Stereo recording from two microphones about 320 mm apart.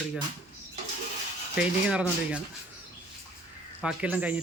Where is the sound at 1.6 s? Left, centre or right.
Centre.